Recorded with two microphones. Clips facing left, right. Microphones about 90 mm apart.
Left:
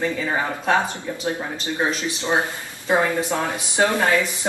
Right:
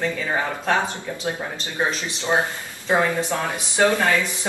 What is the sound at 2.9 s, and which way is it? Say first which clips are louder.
Speech: left 1 dB; 20° left (ahead or behind).